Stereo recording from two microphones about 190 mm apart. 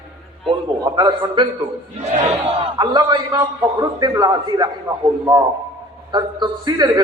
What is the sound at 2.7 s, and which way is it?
A man's voice, 20° right (ahead or behind).